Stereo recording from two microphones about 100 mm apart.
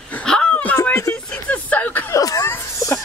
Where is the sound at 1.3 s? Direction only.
15° left (ahead or behind).